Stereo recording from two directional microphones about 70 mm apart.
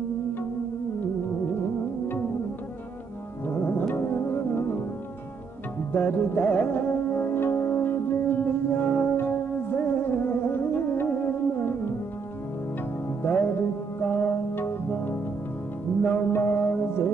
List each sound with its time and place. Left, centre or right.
3.4 s music: left
5.9 s music: left
13.2 s music: left